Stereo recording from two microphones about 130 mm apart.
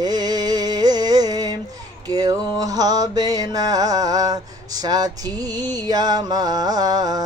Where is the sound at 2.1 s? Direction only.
30° right (ahead or behind).